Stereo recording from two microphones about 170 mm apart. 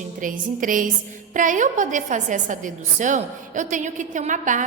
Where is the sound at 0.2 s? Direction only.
50° right (ahead or behind).